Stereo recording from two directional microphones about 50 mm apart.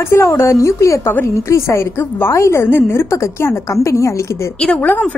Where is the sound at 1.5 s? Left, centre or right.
Left.